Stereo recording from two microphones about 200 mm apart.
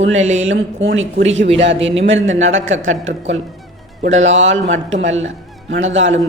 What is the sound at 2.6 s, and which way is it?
A man's voice, 75° right (ahead or behind).